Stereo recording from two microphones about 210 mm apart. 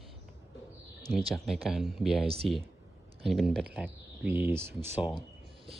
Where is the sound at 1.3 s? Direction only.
Centre (ahead or behind).